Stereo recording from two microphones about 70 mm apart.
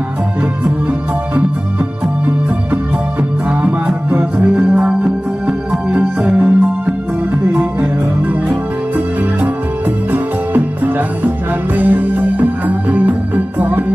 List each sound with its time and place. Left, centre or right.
4.2 s music: centre
8.5 s music: right